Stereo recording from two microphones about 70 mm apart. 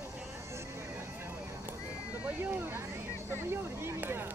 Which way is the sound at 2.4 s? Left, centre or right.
Right.